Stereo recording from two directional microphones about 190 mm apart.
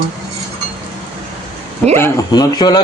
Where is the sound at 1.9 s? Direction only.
15° left (ahead or behind).